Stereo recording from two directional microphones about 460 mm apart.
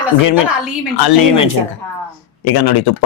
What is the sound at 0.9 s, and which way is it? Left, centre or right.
Speech, left.